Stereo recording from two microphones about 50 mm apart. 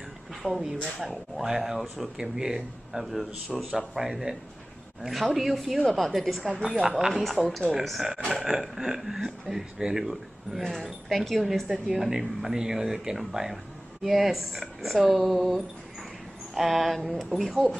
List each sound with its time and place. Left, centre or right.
0.4 s speech: right
0.9 s speech: centre
7.4 s speech: centre
7.8 s speech: centre